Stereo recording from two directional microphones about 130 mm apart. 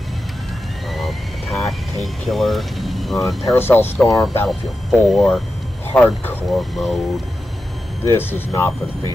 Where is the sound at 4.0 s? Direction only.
Centre (ahead or behind).